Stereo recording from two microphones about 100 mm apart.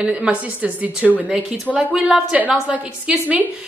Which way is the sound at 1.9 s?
5° right (ahead or behind).